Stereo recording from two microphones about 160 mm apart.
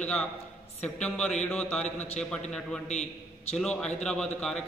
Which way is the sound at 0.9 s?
5° left (ahead or behind).